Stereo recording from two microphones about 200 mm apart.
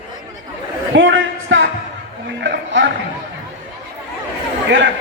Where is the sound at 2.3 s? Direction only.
65° right (ahead or behind).